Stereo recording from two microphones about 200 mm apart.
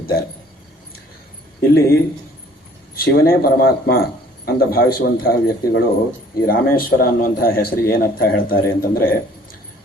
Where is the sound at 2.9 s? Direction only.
50° left (ahead or behind).